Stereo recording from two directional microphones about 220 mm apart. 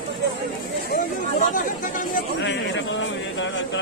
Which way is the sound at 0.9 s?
35° left (ahead or behind).